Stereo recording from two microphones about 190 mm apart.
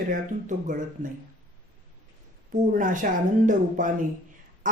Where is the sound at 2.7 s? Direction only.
45° right (ahead or behind).